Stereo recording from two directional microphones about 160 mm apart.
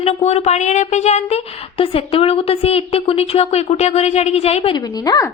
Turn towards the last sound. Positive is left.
turn(degrees=25)  # may be behind; listen again after turning